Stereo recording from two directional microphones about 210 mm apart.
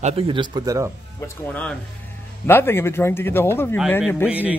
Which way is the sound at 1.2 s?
10° left (ahead or behind).